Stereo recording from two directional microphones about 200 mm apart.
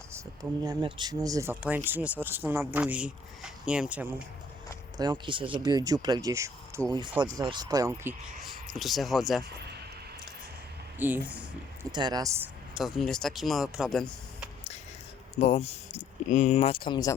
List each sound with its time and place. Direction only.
0.6 s speech: 20° right (ahead or behind)
4.9 s speech: 20° right (ahead or behind)
8.4 s speech: centre (ahead or behind)
10.9 s speech: 10° right (ahead or behind)
11.8 s speech: 20° right (ahead or behind)
12.7 s speech: centre (ahead or behind)
15.4 s speech: 30° left (ahead or behind)